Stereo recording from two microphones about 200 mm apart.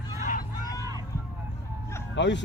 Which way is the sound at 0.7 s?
15° right (ahead or behind).